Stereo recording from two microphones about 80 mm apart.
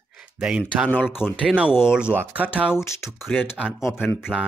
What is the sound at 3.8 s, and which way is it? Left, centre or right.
Speech, left.